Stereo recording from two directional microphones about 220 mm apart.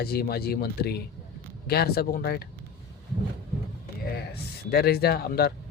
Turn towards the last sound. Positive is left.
turn(degrees=45)  # may be behind; listen again after turning